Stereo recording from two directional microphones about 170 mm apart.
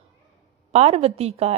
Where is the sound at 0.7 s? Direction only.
40° right (ahead or behind).